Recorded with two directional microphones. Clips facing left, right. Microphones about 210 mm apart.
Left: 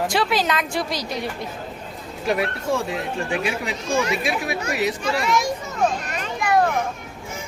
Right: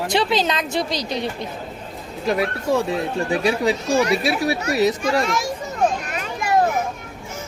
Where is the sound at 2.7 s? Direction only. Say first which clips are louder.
Right 6 dB; 35° right (ahead or behind).